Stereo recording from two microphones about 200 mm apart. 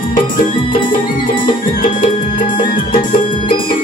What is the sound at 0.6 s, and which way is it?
Music, 25° left (ahead or behind).